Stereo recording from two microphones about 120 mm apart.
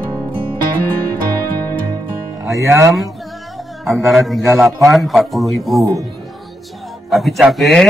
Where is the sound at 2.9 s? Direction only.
Centre (ahead or behind).